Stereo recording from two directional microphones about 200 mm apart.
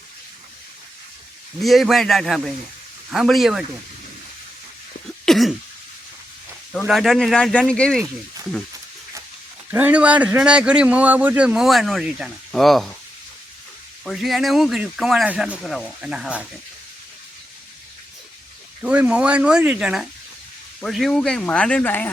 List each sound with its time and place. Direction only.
1.6 s a man's voice: centre (ahead or behind)
5.2 s cough: centre (ahead or behind)
6.7 s a man's voice: centre (ahead or behind)
9.6 s a man's voice: 10° right (ahead or behind)
14.0 s a man's voice: centre (ahead or behind)
18.8 s a man's voice: 5° right (ahead or behind)